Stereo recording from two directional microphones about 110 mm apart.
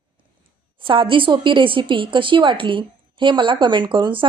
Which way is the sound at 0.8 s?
50° right (ahead or behind).